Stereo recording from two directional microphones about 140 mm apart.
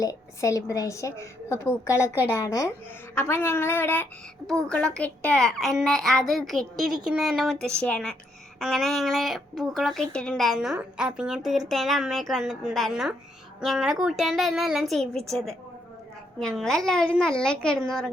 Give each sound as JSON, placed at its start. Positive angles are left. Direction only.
{"t": 0.0, "sound": "a woman's voice", "side_deg": 25}